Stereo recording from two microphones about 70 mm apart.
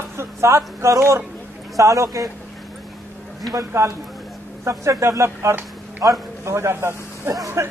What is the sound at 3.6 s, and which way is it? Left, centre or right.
A man's voice, right.